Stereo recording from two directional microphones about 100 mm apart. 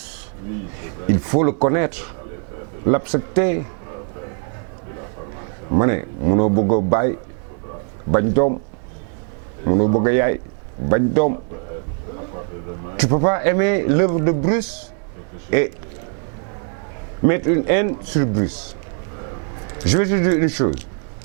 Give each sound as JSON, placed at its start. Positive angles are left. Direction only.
{"t": 1.0, "sound": "speech", "side_deg": -15}
{"t": 5.7, "sound": "speech", "side_deg": -15}
{"t": 9.6, "sound": "speech", "side_deg": -20}
{"t": 13.0, "sound": "speech", "side_deg": -15}
{"t": 17.2, "sound": "speech", "side_deg": -15}
{"t": 19.8, "sound": "speech", "side_deg": -10}